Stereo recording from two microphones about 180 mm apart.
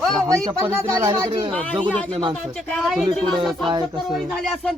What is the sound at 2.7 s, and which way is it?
Speech, centre (ahead or behind).